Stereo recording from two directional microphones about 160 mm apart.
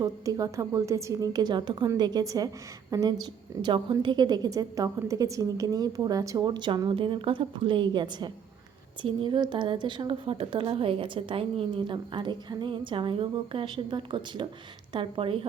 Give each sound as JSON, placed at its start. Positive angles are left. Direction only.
{"t": 0.0, "sound": "a woman's voice", "side_deg": -20}